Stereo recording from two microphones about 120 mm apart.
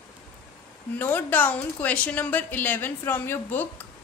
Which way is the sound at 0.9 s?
15° left (ahead or behind).